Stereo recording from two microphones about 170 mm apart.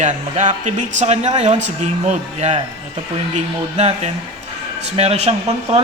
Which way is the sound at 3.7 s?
40° right (ahead or behind).